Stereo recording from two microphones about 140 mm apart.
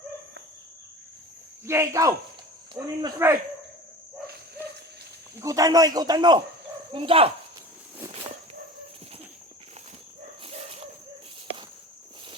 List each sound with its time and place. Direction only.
1.6 s a man's voice: 20° right (ahead or behind)
2.8 s cricket: 10° right (ahead or behind)
5.4 s a man's voice: 25° right (ahead or behind); by 7.3 s 40° right (ahead or behind)
10.4 s dog: 45° right (ahead or behind)